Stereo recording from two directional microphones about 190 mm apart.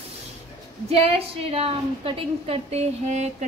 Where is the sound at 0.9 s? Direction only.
30° right (ahead or behind).